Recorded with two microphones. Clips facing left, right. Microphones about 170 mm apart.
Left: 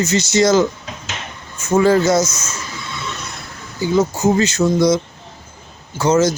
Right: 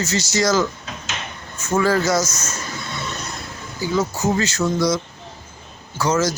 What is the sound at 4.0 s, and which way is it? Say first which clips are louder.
Speech: left 5 dB; 20° left (ahead or behind).